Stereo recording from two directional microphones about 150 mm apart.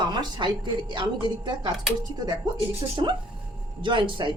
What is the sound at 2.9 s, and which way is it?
A woman's voice, 30° right (ahead or behind).